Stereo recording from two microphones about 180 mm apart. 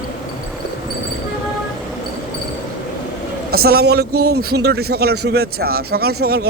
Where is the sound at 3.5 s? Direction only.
60° right (ahead or behind).